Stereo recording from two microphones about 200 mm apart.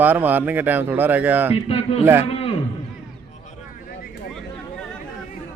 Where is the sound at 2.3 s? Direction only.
30° left (ahead or behind).